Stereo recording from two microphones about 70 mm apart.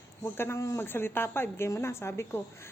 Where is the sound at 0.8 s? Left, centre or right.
Left.